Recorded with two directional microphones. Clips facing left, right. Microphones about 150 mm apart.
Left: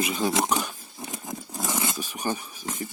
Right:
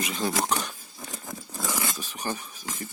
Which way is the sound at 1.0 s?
20° left (ahead or behind).